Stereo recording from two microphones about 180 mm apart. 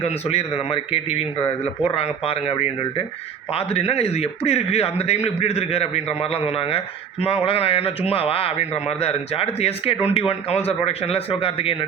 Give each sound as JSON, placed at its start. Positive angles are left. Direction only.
{"t": 0.0, "sound": "a man's voice", "side_deg": 35}